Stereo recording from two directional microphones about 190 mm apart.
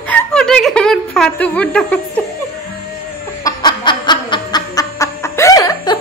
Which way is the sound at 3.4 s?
25° left (ahead or behind).